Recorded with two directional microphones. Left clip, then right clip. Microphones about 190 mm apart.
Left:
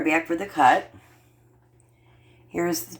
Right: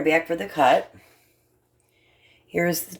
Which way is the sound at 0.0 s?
50° right (ahead or behind).